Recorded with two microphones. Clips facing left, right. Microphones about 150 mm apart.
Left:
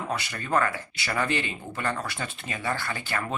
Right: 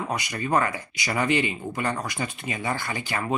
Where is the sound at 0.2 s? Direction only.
15° right (ahead or behind).